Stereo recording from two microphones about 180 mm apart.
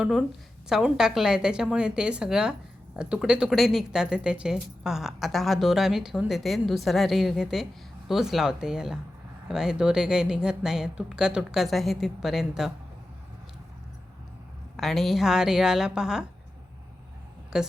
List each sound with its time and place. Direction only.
0.0 s a woman's voice: 5° right (ahead or behind)
14.8 s a woman's voice: centre (ahead or behind)
17.5 s a woman's voice: 5° right (ahead or behind)